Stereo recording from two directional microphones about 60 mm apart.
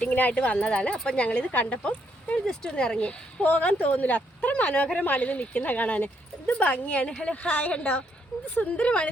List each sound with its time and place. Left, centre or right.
0.0 s speech: left
2.4 s speech: centre
3.4 s speech: left